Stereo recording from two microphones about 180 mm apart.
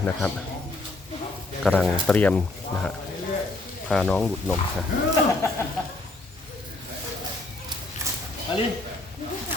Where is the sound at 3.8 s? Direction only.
5° left (ahead or behind).